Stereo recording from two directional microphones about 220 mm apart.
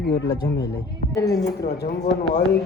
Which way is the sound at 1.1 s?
15° left (ahead or behind).